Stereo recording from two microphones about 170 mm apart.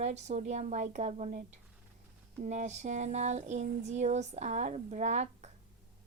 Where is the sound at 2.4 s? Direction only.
45° right (ahead or behind).